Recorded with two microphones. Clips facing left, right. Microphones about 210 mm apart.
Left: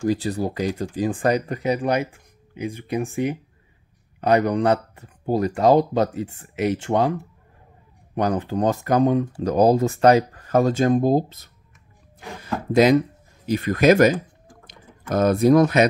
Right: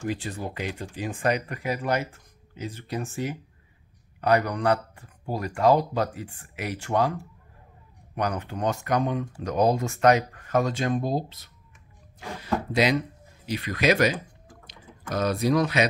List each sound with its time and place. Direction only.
0.1 s speech: 35° left (ahead or behind)
1.6 s speech: 20° left (ahead or behind); by 11.5 s 45° left (ahead or behind)
12.7 s speech: 45° left (ahead or behind)